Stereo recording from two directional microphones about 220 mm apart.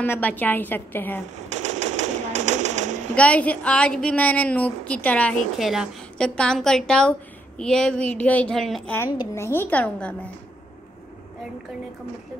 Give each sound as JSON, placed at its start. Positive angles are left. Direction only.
{"t": 0.0, "sound": "a woman's voice", "side_deg": 10}
{"t": 1.5, "sound": "a sound", "side_deg": -30}
{"t": 3.2, "sound": "a woman's voice", "side_deg": 5}